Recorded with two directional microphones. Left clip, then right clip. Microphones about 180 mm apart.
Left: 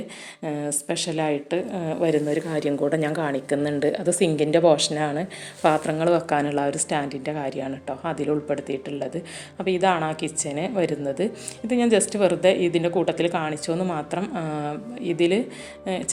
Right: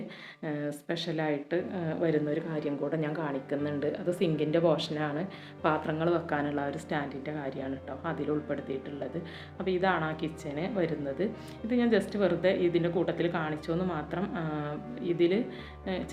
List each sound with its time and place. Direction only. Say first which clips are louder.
0.4 s a woman's voice: left 7 dB; 30° left (ahead or behind)
9.6 s a woman's voice: left 7 dB; 35° left (ahead or behind)